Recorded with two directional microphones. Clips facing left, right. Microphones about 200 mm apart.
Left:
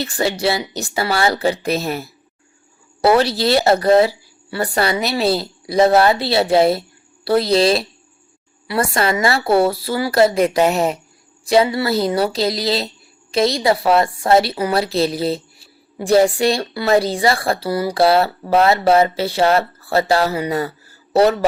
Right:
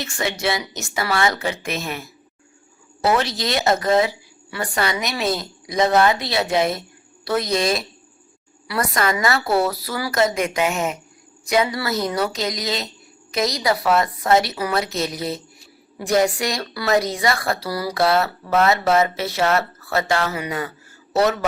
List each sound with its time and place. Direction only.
0.0 s a woman's voice: 35° left (ahead or behind)